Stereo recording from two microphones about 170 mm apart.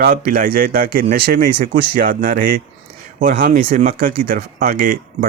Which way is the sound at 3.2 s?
55° right (ahead or behind).